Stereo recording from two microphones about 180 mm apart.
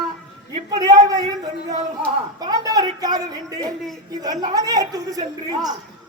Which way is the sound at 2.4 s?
20° right (ahead or behind).